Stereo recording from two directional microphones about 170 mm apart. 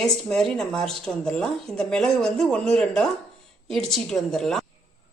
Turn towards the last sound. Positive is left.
turn(degrees=0)  # may be behind; listen again after turning